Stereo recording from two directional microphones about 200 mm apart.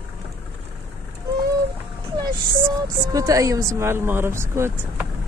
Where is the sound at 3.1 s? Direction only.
15° right (ahead or behind).